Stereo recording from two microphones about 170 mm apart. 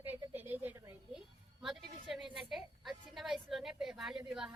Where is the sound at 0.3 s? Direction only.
10° right (ahead or behind).